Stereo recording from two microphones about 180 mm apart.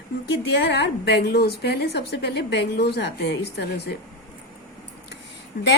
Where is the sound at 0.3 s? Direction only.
65° left (ahead or behind).